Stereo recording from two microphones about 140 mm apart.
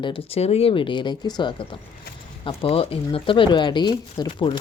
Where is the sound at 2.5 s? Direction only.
40° left (ahead or behind).